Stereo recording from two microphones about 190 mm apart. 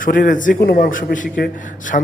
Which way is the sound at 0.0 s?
45° left (ahead or behind).